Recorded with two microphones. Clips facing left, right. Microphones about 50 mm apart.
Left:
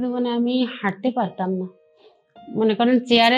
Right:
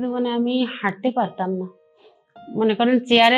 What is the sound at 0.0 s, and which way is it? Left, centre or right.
A woman's voice, right.